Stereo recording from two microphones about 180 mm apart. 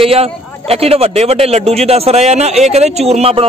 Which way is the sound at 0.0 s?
35° right (ahead or behind).